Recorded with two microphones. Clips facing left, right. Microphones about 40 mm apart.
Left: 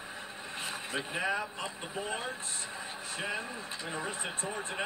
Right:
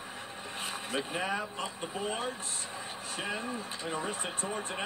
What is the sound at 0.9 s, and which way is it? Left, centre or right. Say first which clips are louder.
Speech: even; left.